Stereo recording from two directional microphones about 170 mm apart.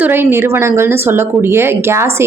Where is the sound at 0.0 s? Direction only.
10° right (ahead or behind).